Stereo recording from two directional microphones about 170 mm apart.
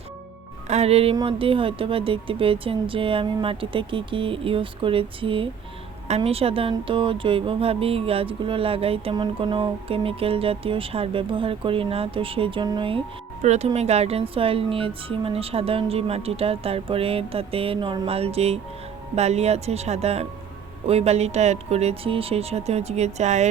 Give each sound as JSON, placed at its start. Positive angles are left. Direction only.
{"t": 0.7, "sound": "speech", "side_deg": -40}
{"t": 13.4, "sound": "speech", "side_deg": -40}